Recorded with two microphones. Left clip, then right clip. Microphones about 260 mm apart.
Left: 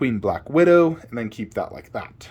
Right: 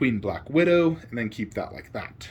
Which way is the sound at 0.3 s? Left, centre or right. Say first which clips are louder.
Left 7 dB; centre.